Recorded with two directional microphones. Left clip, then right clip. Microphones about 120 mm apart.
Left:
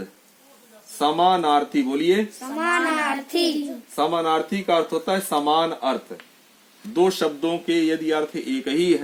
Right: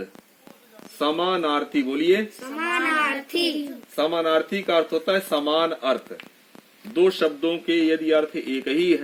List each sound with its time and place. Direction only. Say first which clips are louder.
0.9 s speech: left 4 dB; 35° left (ahead or behind)
3.9 s speech: even; 25° left (ahead or behind)